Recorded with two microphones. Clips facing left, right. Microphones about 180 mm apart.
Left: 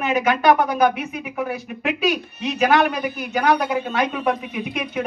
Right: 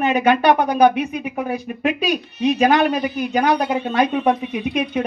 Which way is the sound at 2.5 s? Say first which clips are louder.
Right 1 dB; 30° right (ahead or behind).